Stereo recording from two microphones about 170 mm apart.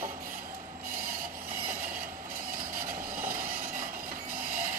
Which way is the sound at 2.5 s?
55° right (ahead or behind).